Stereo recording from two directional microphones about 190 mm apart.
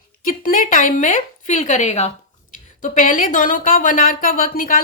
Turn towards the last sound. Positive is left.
turn(degrees=45)  # may be behind; listen again after turning